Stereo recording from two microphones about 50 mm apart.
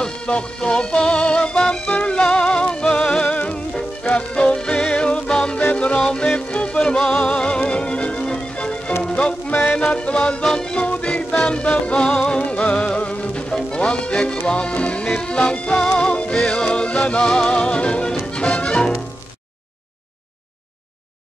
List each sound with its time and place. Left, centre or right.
0.0 s music: centre
5.9 s music: centre
9.5 s music: left
9.8 s music: left